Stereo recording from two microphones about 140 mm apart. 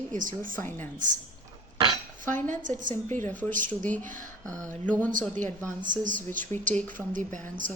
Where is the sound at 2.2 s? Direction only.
65° right (ahead or behind).